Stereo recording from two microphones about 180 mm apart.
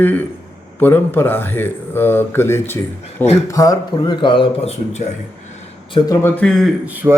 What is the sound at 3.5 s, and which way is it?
Speech, 20° left (ahead or behind).